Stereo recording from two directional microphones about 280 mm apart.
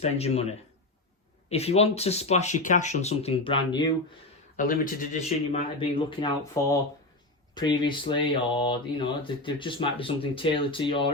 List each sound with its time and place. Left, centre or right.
0.0 s speech: left
4.5 s speech: left
5.5 s speech: centre